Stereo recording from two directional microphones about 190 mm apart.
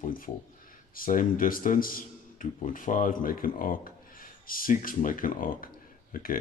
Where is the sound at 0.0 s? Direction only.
45° left (ahead or behind).